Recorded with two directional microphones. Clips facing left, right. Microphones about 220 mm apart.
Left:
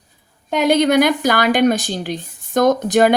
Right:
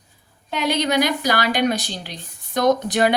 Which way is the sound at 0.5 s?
50° left (ahead or behind).